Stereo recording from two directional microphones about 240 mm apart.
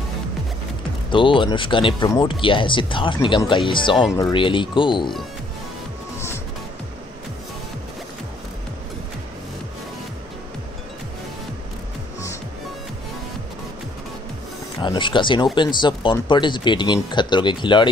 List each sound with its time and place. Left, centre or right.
1.1 s speech: left
6.1 s music: centre
14.8 s speech: centre